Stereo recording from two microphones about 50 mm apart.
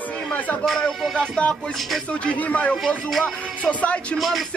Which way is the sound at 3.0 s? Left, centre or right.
Centre.